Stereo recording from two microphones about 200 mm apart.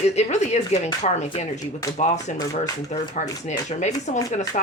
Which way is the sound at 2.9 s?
35° left (ahead or behind).